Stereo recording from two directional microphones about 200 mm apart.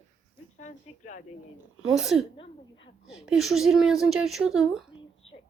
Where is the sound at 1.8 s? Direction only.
Centre (ahead or behind).